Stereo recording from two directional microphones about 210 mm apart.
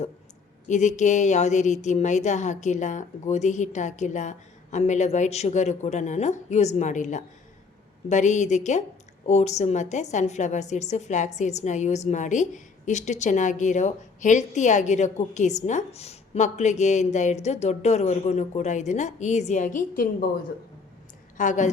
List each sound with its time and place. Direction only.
0.7 s a woman's voice: 35° left (ahead or behind)